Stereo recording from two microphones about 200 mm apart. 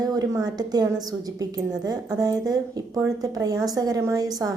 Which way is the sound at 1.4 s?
20° right (ahead or behind).